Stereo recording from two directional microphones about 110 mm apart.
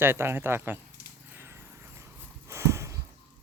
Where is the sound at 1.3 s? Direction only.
25° right (ahead or behind).